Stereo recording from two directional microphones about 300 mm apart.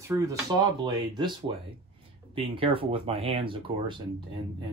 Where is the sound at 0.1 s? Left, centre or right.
Centre.